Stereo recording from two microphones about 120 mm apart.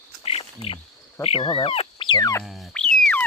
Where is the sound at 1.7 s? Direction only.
50° left (ahead or behind).